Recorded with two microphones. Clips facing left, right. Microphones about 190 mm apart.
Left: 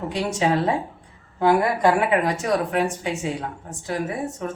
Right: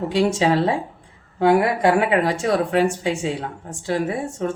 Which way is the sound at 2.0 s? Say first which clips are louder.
Right 2 dB; 30° right (ahead or behind).